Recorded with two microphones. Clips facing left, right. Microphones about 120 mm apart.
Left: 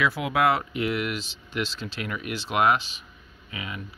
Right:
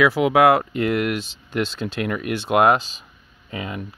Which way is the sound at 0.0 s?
90° right.